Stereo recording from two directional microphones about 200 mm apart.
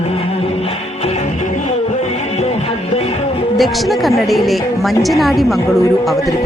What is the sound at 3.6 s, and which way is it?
Speech, centre (ahead or behind).